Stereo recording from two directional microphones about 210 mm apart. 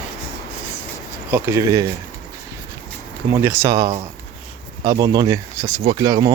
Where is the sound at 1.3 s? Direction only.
10° right (ahead or behind).